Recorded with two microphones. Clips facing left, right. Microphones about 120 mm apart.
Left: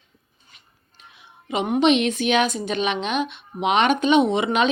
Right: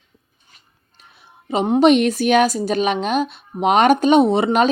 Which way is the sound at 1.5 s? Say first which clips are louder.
Right 5 dB; 35° right (ahead or behind).